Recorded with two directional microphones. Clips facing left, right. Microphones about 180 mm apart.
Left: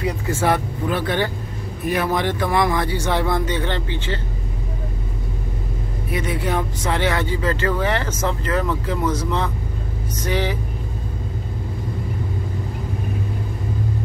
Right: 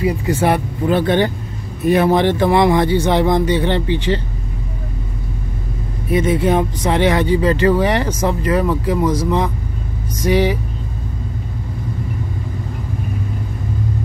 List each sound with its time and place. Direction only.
0.3 s speech: 15° right (ahead or behind)
6.1 s speech: 20° right (ahead or behind)